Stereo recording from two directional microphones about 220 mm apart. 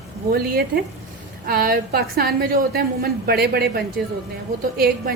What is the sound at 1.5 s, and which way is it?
A woman's voice, 40° right (ahead or behind).